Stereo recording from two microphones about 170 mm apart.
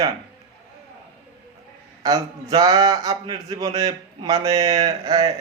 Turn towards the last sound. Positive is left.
turn(degrees=-25)  # may be behind; listen again after turning